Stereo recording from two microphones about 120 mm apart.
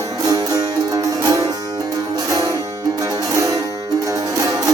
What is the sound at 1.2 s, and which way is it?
Music, 25° right (ahead or behind).